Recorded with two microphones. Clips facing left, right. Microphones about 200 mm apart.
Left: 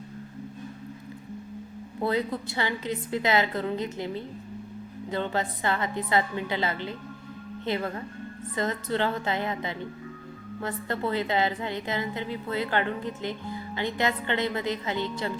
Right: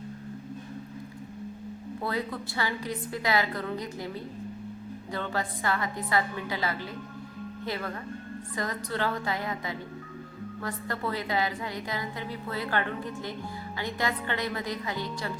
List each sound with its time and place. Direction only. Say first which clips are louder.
2.0 s a woman's voice: left 5 dB; 20° left (ahead or behind)